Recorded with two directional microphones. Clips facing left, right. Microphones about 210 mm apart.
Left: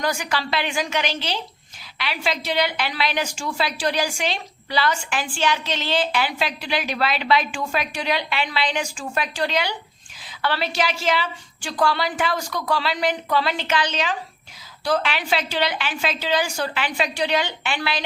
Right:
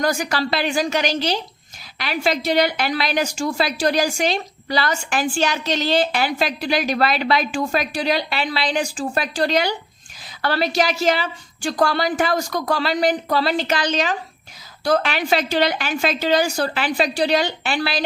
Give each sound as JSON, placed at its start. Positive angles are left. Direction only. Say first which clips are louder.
{"t": 0.0, "sound": "a woman's voice", "louder": "right 4 dB", "side_deg": -40}